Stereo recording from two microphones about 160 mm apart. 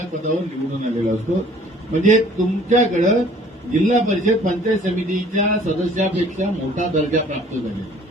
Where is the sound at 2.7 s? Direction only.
50° right (ahead or behind).